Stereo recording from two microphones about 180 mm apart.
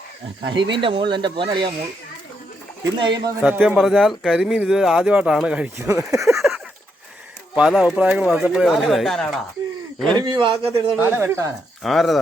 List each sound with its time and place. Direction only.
0.4 s speech: 25° right (ahead or behind)
3.0 s speech: 25° right (ahead or behind)
3.4 s speech: 5° right (ahead or behind)
6.2 s a sound: centre (ahead or behind)
7.5 s speech: 5° right (ahead or behind)
10.2 s speech: 25° right (ahead or behind)
10.9 s speech: 10° right (ahead or behind)
11.8 s speech: centre (ahead or behind)